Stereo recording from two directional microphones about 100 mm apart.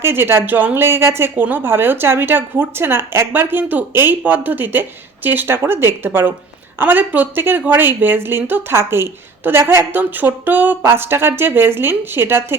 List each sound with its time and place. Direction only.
0.0 s a woman's voice: 25° right (ahead or behind)